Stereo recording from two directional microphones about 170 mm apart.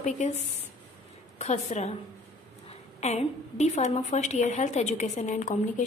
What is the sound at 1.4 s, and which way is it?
Speech, 45° left (ahead or behind).